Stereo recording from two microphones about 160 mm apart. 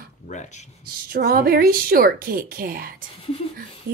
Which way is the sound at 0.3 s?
45° left (ahead or behind).